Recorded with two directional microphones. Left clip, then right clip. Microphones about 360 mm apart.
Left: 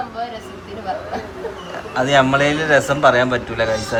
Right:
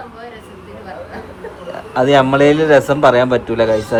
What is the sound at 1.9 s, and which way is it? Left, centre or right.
A man's voice, centre.